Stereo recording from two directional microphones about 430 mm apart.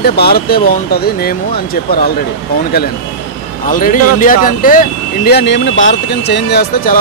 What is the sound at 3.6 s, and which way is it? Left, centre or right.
Speech, centre.